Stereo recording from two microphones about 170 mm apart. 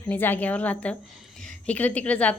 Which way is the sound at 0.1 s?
10° left (ahead or behind).